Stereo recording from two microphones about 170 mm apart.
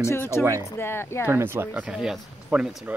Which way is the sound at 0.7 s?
15° left (ahead or behind).